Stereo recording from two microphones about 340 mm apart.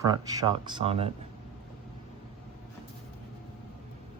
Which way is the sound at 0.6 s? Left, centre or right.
Centre.